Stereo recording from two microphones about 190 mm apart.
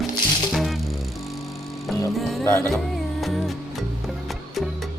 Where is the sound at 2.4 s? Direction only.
15° left (ahead or behind).